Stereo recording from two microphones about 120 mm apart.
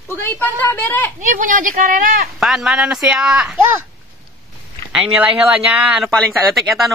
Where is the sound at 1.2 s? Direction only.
90° right.